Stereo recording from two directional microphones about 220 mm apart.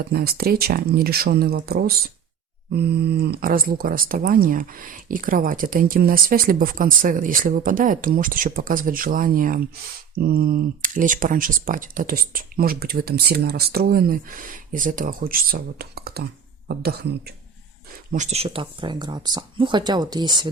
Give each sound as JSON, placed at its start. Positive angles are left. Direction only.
{"t": 0.1, "sound": "speech", "side_deg": -45}
{"t": 18.1, "sound": "speech", "side_deg": -30}